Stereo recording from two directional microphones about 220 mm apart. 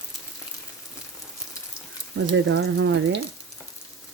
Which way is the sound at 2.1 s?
50° right (ahead or behind).